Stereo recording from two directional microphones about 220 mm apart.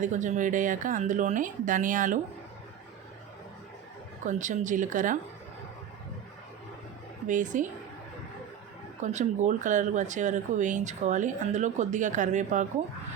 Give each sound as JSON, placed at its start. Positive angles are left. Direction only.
{"t": 0.0, "sound": "speech", "side_deg": -35}
{"t": 4.2, "sound": "speech", "side_deg": -35}
{"t": 7.3, "sound": "speech", "side_deg": -35}
{"t": 9.0, "sound": "speech", "side_deg": -35}